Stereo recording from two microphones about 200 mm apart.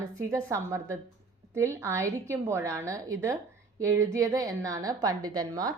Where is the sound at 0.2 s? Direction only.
15° right (ahead or behind).